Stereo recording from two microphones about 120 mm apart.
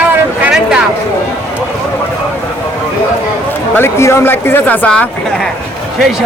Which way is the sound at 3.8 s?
20° left (ahead or behind).